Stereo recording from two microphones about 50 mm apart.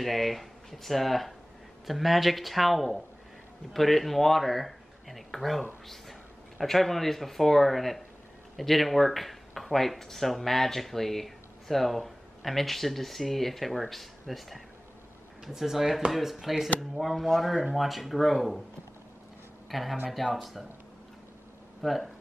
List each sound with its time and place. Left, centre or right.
0.0 s speech: centre
19.7 s speech: centre
21.8 s speech: centre